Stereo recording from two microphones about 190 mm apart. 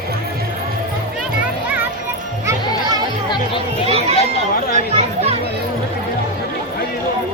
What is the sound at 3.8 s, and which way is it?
Chatter, 35° right (ahead or behind).